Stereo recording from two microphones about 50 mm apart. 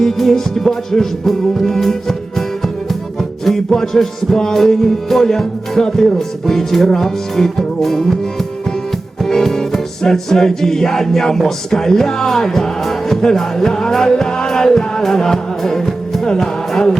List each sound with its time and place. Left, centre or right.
0.0 s music: centre
3.4 s music: centre
9.2 s music: centre